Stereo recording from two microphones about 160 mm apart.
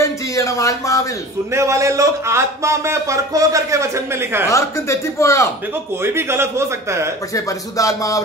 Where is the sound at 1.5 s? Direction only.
20° right (ahead or behind).